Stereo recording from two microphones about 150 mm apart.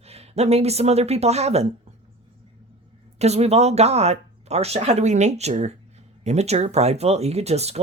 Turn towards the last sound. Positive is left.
turn(degrees=-45)  # may be behind; listen again after turning